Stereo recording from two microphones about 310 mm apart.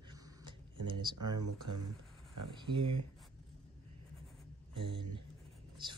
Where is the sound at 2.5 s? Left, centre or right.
Centre.